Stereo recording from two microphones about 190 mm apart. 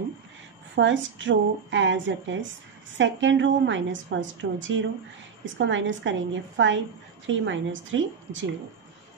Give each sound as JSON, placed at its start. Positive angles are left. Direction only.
{"t": 0.7, "sound": "a woman's voice", "side_deg": -75}